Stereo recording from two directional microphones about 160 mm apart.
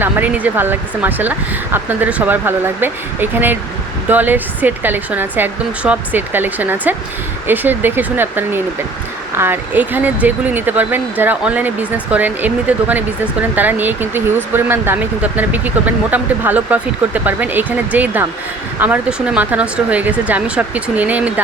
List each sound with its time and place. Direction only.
0.0 s speech: 10° right (ahead or behind)